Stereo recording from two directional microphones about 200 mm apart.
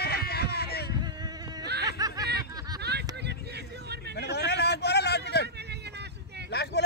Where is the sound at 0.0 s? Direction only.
50° left (ahead or behind).